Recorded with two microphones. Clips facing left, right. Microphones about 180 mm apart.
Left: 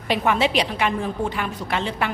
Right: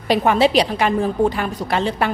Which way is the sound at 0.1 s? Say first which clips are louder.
Right 5 dB; 35° right (ahead or behind).